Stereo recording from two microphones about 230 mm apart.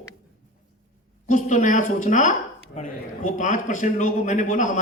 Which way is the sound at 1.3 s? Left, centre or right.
Left.